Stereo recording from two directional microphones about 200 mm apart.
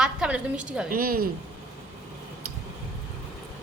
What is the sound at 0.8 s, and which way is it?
Speech, 45° right (ahead or behind).